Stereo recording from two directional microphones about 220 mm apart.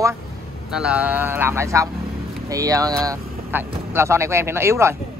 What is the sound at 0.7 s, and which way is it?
Speech, 5° right (ahead or behind).